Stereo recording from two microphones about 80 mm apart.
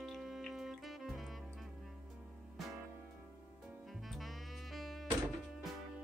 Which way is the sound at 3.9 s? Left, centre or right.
Centre.